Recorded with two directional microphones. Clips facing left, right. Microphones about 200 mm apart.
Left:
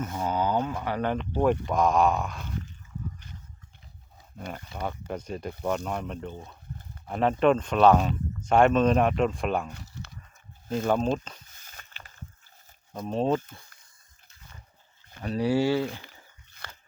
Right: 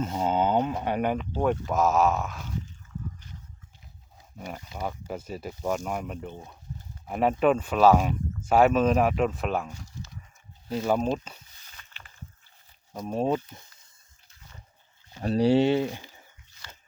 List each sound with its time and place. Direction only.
0.0 s speech: 25° right (ahead or behind)
1.3 s speech: 5° left (ahead or behind)
4.4 s speech: 10° right (ahead or behind)
10.0 s a sound: 65° left (ahead or behind)
10.8 s speech: 5° right (ahead or behind)
11.5 s a sound: 45° left (ahead or behind)
13.1 s speech: 10° right (ahead or behind)
15.2 s speech: 30° right (ahead or behind)
16.5 s a sound: 60° left (ahead or behind)